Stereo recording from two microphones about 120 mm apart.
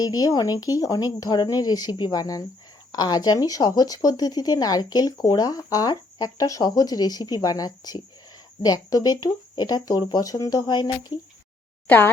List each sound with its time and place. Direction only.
0.0 s speech: 35° left (ahead or behind)
11.9 s speech: 15° left (ahead or behind)